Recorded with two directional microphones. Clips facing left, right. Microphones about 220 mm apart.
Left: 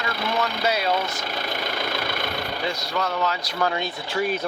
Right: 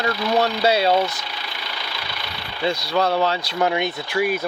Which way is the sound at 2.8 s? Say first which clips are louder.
Right 6 dB; 35° right (ahead or behind).